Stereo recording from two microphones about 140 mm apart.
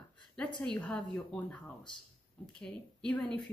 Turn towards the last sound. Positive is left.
turn(degrees=5)  # may be behind; listen again after turning